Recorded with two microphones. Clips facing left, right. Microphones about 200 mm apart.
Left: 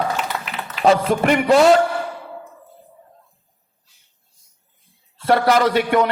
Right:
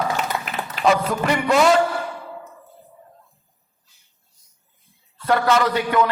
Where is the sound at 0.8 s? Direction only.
30° left (ahead or behind).